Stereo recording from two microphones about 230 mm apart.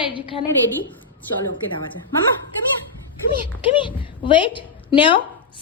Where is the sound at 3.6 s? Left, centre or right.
Left.